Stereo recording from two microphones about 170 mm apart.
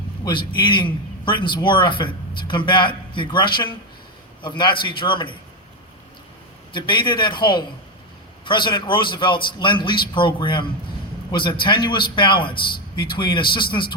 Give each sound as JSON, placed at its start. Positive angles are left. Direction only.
{"t": 0.3, "sound": "a man's voice", "side_deg": 30}
{"t": 6.7, "sound": "a man's voice", "side_deg": 30}